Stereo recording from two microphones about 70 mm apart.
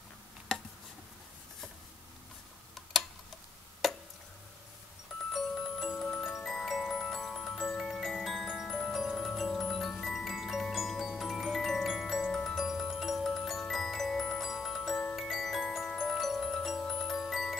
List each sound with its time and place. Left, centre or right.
3.8 s a sound: centre
5.9 s glockenspiel: centre
12.6 s glockenspiel: centre
15.1 s glockenspiel: centre
16.0 s music: centre
16.8 s glockenspiel: centre